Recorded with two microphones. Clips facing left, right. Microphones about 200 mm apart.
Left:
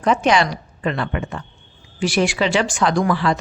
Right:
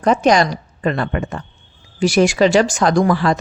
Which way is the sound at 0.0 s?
40° right (ahead or behind).